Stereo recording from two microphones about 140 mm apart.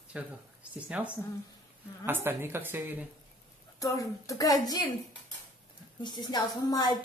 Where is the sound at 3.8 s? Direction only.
25° left (ahead or behind).